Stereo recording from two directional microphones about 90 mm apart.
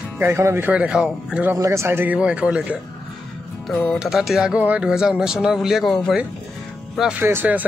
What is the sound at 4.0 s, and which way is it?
Speech, 5° right (ahead or behind).